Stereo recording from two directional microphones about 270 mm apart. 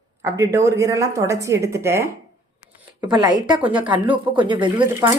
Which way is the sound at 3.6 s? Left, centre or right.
Centre.